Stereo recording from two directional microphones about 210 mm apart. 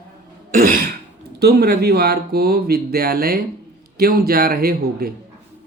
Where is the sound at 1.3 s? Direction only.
50° right (ahead or behind).